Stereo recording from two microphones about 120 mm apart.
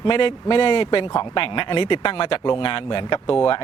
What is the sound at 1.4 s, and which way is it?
Speech, 45° left (ahead or behind).